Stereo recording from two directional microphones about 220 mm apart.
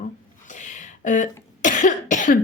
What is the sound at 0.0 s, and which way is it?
Cough, 35° left (ahead or behind).